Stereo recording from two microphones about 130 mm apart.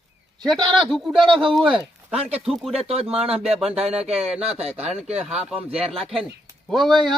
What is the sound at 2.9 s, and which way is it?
Speech, 50° right (ahead or behind).